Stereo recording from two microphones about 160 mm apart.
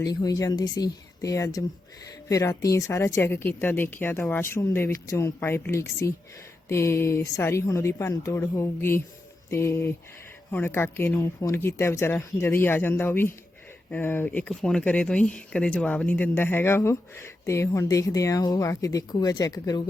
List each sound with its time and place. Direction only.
0.0 s speech: 25° left (ahead or behind)